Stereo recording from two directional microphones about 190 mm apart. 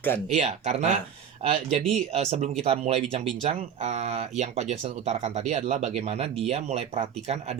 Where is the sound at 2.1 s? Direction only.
35° right (ahead or behind).